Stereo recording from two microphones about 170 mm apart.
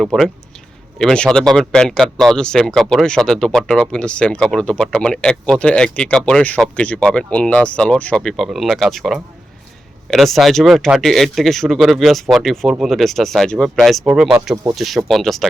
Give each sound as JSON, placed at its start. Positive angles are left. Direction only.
{"t": 0.0, "sound": "speech", "side_deg": 0}
{"t": 14.5, "sound": "speech", "side_deg": -20}
{"t": 14.8, "sound": "speech", "side_deg": 0}